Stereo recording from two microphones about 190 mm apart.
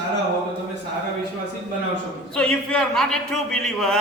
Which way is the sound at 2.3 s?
5° left (ahead or behind).